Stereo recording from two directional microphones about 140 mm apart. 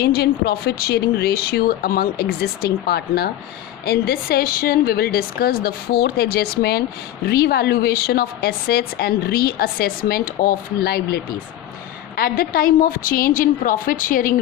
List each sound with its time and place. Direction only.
0.0 s a woman's voice: 90° left